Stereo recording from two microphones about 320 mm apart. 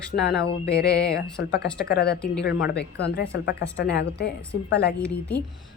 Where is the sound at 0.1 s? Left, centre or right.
Left.